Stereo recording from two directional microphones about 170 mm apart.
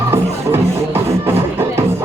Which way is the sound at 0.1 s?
15° right (ahead or behind).